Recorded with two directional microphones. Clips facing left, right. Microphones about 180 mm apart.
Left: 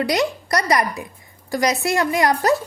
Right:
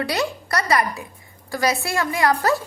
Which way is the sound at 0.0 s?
15° left (ahead or behind).